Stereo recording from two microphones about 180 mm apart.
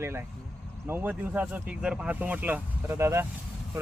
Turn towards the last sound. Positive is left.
turn(degrees=-15)  # may be behind; listen again after turning